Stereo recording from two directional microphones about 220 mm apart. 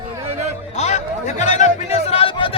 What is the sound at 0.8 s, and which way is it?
Chatter, 30° left (ahead or behind).